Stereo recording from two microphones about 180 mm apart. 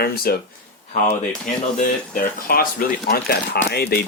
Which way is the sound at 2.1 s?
55° left (ahead or behind).